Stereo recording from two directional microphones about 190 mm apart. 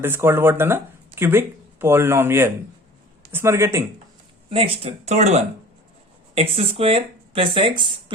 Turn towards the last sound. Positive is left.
turn(degrees=-25)  # may be behind; listen again after turning